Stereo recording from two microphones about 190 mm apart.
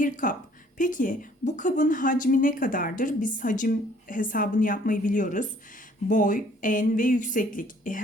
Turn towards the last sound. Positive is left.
turn(degrees=45)  # may be behind; listen again after turning